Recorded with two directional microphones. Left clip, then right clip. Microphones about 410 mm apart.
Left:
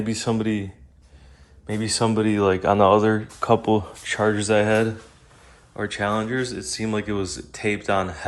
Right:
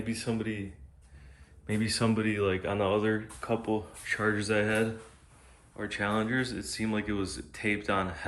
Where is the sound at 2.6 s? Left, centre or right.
Left.